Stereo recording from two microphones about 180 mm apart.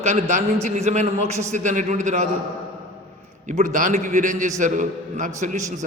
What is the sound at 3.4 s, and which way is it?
A man's voice, 45° right (ahead or behind).